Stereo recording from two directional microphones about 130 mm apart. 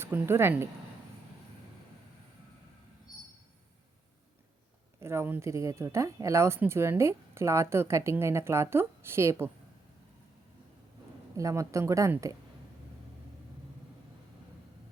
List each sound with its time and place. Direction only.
0.0 s speech: 20° right (ahead or behind)
4.9 s speech: 20° right (ahead or behind)
11.3 s speech: 25° right (ahead or behind)